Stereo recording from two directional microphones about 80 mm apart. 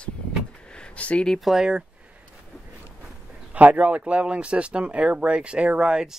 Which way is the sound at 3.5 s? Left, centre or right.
Centre.